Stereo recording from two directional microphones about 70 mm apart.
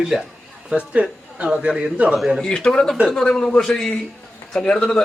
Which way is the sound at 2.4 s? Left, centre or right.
Centre.